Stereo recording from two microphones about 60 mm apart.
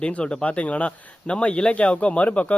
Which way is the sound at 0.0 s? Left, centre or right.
Left.